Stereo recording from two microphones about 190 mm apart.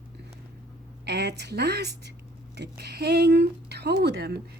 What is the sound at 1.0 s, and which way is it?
Speech, 60° right (ahead or behind).